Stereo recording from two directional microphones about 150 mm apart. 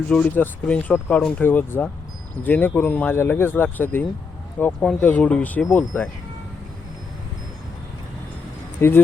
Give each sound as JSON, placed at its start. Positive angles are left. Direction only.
{"t": 0.1, "sound": "speech", "side_deg": 10}
{"t": 8.8, "sound": "speech", "side_deg": 15}